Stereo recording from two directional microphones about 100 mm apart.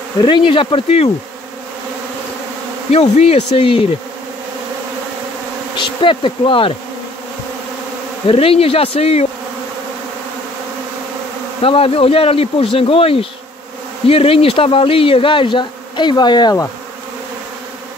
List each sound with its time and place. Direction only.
0.2 s speech: 55° left (ahead or behind); by 1.1 s 80° left
2.9 s speech: 90° left; by 3.8 s 65° left (ahead or behind)
5.8 s speech: 55° left (ahead or behind)
8.3 s speech: 70° left (ahead or behind)
11.6 s speech: 75° left (ahead or behind); by 16.6 s 45° left (ahead or behind)